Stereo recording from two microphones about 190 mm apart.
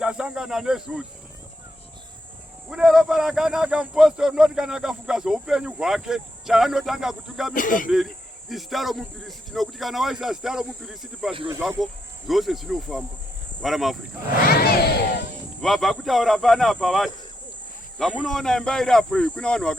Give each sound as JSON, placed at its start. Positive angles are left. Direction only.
{"t": 0.0, "sound": "a man's voice", "side_deg": -5}
{"t": 2.6, "sound": "a man's voice", "side_deg": 0}
{"t": 7.5, "sound": "speech", "side_deg": 45}
{"t": 7.9, "sound": "a man's voice", "side_deg": 0}
{"t": 14.4, "sound": "a sound", "side_deg": 55}
{"t": 15.6, "sound": "a man's voice", "side_deg": 0}